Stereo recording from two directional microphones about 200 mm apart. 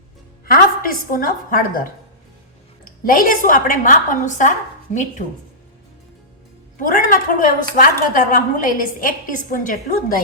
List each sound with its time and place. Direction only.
0.4 s a woman's voice: 45° left (ahead or behind)
6.7 s a woman's voice: 40° left (ahead or behind)